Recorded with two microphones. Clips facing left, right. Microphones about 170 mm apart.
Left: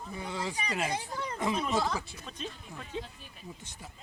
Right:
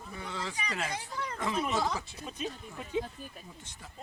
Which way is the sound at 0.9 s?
25° left (ahead or behind).